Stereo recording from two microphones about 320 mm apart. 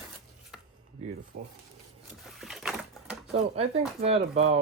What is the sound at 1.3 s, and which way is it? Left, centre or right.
Speech, right.